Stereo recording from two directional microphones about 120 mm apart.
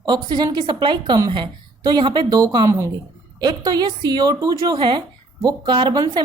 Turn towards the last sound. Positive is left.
turn(degrees=-40)  # may be behind; listen again after turning